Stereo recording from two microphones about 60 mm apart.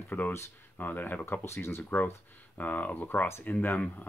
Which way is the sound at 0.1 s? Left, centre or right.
Left.